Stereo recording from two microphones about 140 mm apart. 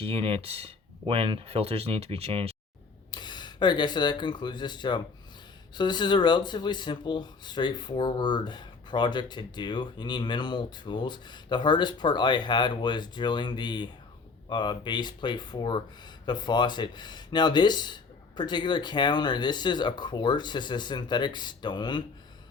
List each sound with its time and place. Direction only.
0.0 s speech: 40° right (ahead or behind)
3.1 s speech: 30° left (ahead or behind)